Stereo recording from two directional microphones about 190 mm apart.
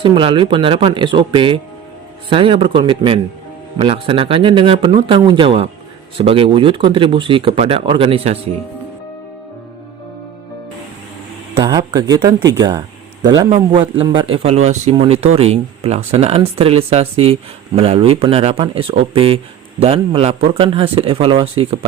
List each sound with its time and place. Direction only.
0.0 s speech: 25° right (ahead or behind)
11.5 s a sound: 20° right (ahead or behind)
11.9 s speech: 20° right (ahead or behind)